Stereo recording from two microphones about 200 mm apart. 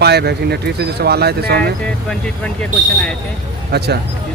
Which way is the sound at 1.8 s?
5° left (ahead or behind).